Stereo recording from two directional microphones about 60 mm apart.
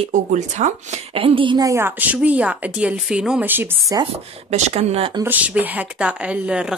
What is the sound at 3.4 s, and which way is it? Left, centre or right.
Speech, right.